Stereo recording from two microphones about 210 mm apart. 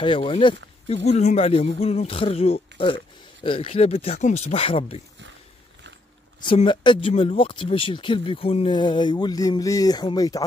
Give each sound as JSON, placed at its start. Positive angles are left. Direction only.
{"t": 0.0, "sound": "speech", "side_deg": 25}
{"t": 6.4, "sound": "speech", "side_deg": 25}